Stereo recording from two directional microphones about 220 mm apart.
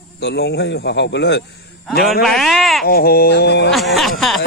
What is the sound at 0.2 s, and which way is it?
Speech, 50° left (ahead or behind).